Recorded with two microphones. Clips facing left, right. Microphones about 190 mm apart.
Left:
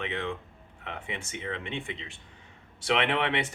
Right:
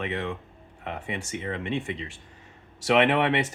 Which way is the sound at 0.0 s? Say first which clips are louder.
Right 3 dB; 40° right (ahead or behind).